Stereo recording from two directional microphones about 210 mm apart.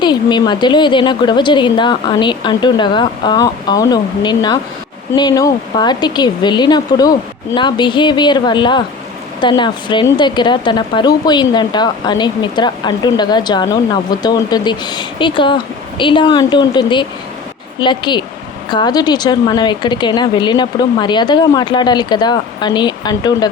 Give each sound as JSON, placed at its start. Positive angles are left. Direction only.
{"t": 0.0, "sound": "speech", "side_deg": 20}